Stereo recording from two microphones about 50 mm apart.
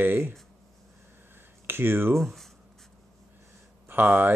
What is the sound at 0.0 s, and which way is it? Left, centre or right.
Speech, right.